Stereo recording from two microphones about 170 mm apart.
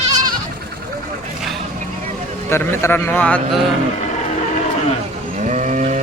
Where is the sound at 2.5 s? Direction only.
15° left (ahead or behind).